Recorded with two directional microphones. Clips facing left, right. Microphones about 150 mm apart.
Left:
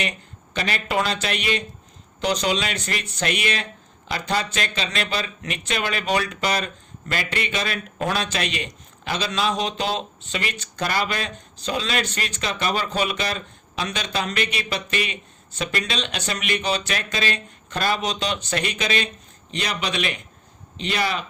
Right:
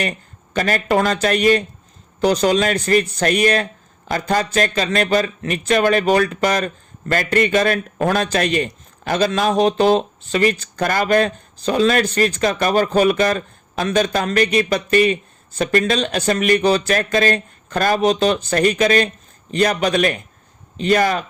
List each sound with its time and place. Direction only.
0.5 s speech: 45° right (ahead or behind)